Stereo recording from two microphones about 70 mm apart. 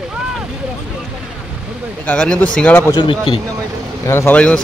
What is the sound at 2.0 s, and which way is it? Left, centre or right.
Speech, centre.